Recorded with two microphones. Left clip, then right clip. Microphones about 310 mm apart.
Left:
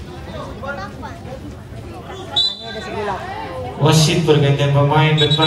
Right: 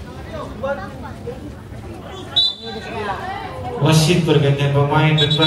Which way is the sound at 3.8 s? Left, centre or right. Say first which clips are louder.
Left 2 dB; left.